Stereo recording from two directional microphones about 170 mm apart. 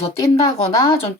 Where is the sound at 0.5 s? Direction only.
35° left (ahead or behind).